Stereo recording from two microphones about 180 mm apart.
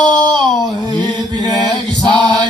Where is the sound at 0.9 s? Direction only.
25° right (ahead or behind).